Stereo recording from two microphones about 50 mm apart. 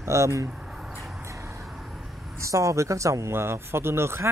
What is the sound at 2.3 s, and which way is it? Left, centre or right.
Speech, right.